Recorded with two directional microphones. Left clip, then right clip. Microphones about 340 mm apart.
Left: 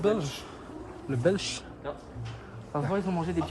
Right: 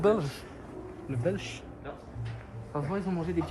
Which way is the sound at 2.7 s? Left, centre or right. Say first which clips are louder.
Left 3 dB; left.